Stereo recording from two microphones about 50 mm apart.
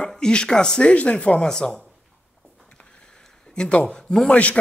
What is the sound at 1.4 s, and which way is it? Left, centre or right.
Speech, centre.